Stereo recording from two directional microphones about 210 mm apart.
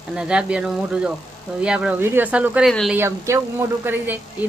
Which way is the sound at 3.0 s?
15° right (ahead or behind).